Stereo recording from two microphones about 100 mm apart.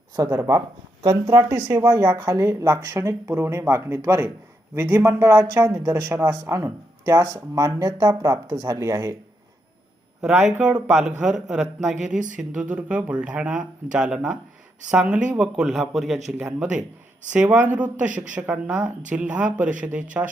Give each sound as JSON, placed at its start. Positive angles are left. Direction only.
{"t": 0.3, "sound": "speech", "side_deg": -25}
{"t": 4.7, "sound": "speech", "side_deg": -20}
{"t": 10.2, "sound": "speech", "side_deg": -10}